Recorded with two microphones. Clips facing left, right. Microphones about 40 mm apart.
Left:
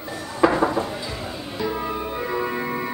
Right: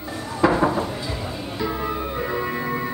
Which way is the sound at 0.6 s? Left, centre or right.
Centre.